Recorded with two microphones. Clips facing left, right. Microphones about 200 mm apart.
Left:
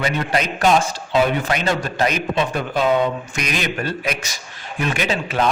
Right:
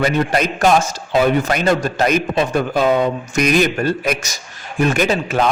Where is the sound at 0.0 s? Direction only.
45° right (ahead or behind).